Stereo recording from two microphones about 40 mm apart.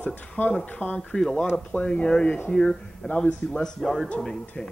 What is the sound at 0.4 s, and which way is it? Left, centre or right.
Speech, left.